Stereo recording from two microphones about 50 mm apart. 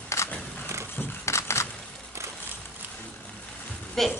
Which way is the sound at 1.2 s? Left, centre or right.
Left.